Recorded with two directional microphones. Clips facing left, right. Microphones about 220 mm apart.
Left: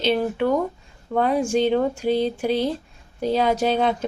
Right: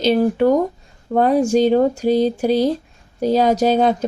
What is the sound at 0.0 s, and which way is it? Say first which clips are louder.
Speech: right 6 dB; 40° right (ahead or behind).